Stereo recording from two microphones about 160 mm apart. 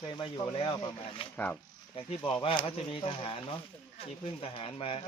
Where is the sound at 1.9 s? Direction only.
35° left (ahead or behind).